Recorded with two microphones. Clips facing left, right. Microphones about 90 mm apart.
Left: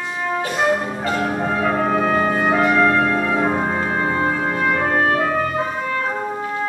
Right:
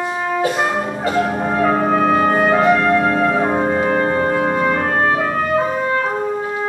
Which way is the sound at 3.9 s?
55° right (ahead or behind).